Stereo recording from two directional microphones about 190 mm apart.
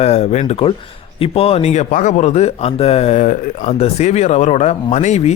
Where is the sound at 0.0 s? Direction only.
35° left (ahead or behind).